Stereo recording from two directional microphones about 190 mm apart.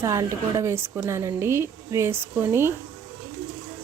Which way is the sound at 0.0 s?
15° right (ahead or behind).